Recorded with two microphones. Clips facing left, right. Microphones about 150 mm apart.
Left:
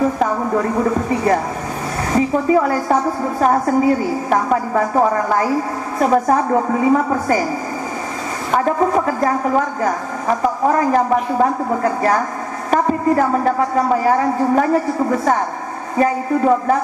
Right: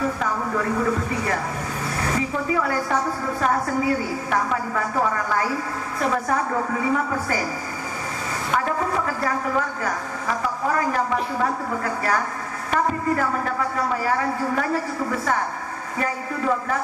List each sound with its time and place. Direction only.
2.1 s a woman's voice: 35° left (ahead or behind)
8.5 s a woman's voice: 35° left (ahead or behind)